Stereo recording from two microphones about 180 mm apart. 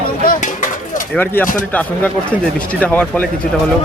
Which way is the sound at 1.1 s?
10° left (ahead or behind).